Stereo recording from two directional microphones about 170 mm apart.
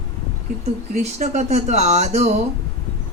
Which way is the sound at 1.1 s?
40° right (ahead or behind).